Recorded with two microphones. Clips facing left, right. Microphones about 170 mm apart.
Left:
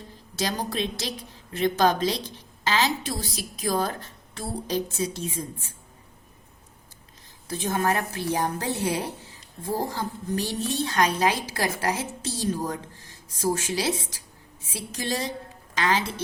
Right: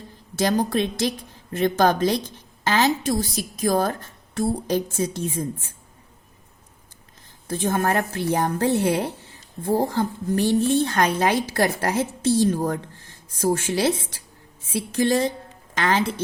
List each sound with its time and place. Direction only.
0.3 s a woman's voice: 55° right (ahead or behind)
7.4 s a woman's voice: 50° right (ahead or behind)